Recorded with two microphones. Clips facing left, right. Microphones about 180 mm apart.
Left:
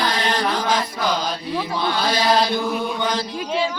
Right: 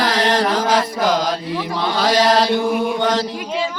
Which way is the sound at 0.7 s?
90° right.